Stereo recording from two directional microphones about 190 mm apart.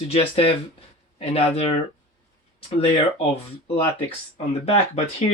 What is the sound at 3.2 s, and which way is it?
Speech, 30° left (ahead or behind).